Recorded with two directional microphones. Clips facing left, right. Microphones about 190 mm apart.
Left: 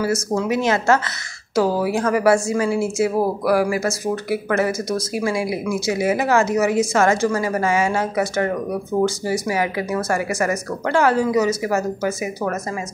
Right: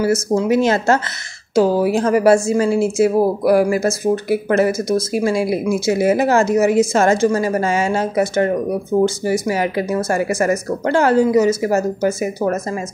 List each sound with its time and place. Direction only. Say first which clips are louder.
0.0 s speech: right 4 dB; 25° right (ahead or behind)